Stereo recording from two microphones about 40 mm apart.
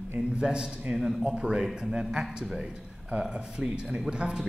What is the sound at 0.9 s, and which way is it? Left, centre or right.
Speech, centre.